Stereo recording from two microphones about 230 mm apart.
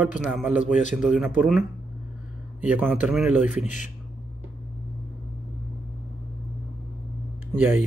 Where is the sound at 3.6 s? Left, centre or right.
Left.